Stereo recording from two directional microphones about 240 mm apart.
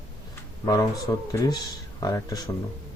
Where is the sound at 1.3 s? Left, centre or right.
Centre.